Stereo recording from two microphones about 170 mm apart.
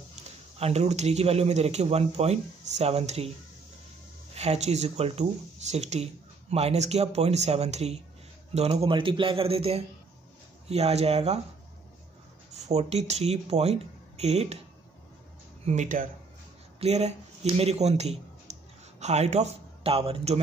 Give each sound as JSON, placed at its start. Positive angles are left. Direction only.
{"t": 0.6, "sound": "speech", "side_deg": -40}
{"t": 4.4, "sound": "speech", "side_deg": -40}
{"t": 12.6, "sound": "speech", "side_deg": -40}
{"t": 15.6, "sound": "speech", "side_deg": -45}